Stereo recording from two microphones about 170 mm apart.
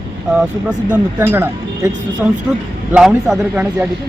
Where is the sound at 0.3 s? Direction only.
5° right (ahead or behind).